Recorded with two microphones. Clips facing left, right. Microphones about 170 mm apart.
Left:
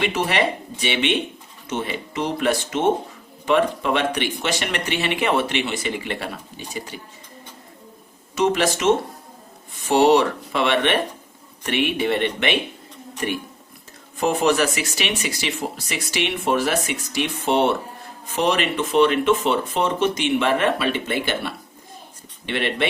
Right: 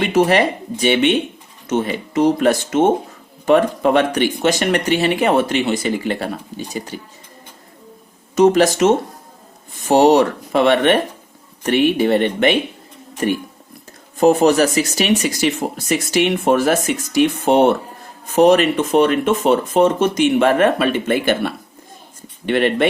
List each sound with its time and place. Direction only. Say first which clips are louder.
0.0 s speech: right 7 dB; 45° right (ahead or behind)
8.4 s speech: right 8 dB; 40° right (ahead or behind)
14.2 s speech: right 7 dB; 40° right (ahead or behind)